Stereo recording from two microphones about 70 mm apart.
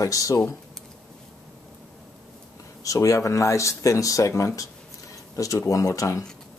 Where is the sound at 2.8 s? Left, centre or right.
Left.